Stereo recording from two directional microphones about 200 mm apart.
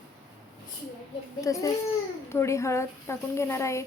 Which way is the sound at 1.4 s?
15° left (ahead or behind).